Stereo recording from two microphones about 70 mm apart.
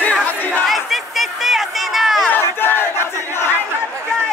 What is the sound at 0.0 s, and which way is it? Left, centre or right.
Battle cry, left.